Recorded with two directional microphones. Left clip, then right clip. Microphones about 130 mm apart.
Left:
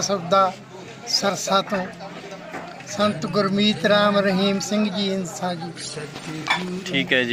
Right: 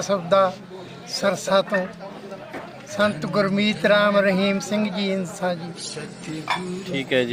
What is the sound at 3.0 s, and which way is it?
Speech, centre (ahead or behind).